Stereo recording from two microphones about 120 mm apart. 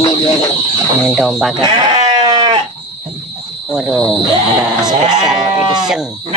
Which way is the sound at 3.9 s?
5° left (ahead or behind).